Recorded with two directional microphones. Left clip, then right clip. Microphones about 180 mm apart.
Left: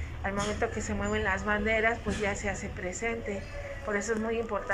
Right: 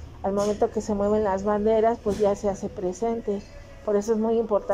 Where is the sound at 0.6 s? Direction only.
30° right (ahead or behind).